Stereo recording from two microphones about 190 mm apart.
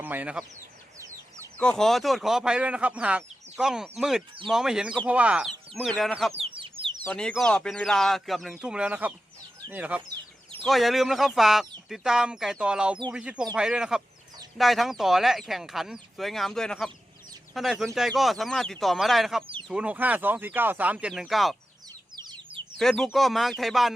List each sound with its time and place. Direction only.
0.0 s speech: 10° right (ahead or behind)
0.9 s bird: 15° right (ahead or behind)
1.5 s speech: 5° left (ahead or behind)
6.3 s chicken: 30° right (ahead or behind)
7.0 s speech: 5° left (ahead or behind)
22.1 s chicken: 20° right (ahead or behind)
22.8 s speech: centre (ahead or behind)